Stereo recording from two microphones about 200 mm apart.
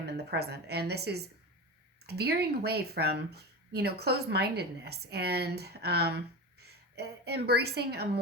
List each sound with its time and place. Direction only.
0.0 s a woman's voice: 55° right (ahead or behind)